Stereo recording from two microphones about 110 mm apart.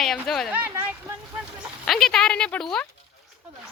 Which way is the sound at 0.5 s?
20° right (ahead or behind).